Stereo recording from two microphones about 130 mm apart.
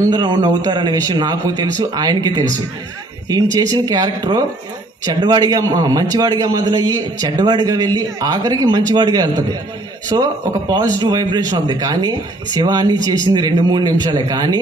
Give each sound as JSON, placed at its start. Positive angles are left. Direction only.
{"t": 0.0, "sound": "speech", "side_deg": -35}
{"t": 3.5, "sound": "a man's voice", "side_deg": -30}
{"t": 10.1, "sound": "speech", "side_deg": -30}